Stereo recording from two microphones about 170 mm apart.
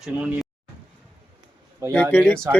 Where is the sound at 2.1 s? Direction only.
10° left (ahead or behind).